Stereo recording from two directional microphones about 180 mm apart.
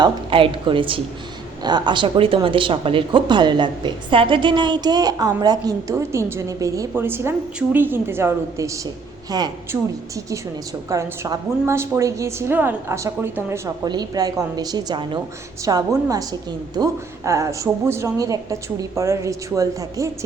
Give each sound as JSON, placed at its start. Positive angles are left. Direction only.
{"t": 0.0, "sound": "a woman's voice", "side_deg": -30}